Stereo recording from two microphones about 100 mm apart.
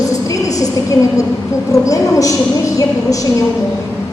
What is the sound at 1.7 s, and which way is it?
A woman's voice, 35° left (ahead or behind).